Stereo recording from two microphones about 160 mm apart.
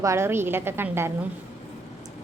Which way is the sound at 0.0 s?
15° right (ahead or behind).